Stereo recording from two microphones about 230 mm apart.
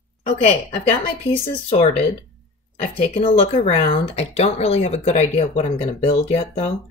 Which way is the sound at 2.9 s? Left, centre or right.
Left.